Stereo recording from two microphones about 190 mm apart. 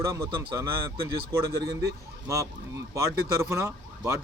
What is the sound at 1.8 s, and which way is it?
Speech, 15° right (ahead or behind).